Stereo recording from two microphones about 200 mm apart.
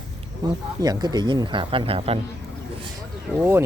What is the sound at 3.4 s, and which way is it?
Speech, 10° right (ahead or behind).